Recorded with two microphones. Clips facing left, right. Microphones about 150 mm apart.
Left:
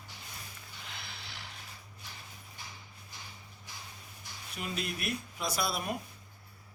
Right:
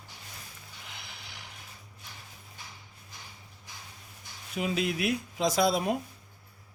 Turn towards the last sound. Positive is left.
turn(degrees=-90)